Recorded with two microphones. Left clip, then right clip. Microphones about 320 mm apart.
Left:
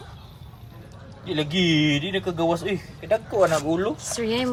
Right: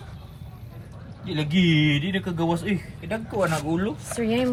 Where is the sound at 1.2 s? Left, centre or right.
Left.